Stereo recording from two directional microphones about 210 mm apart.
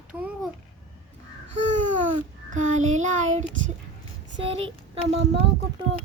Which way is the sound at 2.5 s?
35° right (ahead or behind).